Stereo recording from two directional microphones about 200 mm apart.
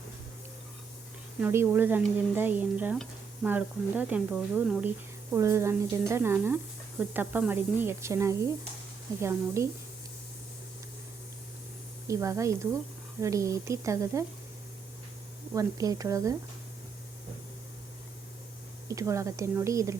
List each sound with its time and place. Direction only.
1.4 s speech: 10° right (ahead or behind)
9.6 s speech: 15° right (ahead or behind)
12.0 s speech: 15° right (ahead or behind)
15.5 s speech: 15° right (ahead or behind)
18.9 s speech: 15° right (ahead or behind)